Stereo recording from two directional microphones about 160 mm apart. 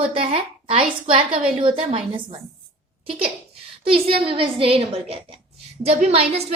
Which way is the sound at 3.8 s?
35° right (ahead or behind).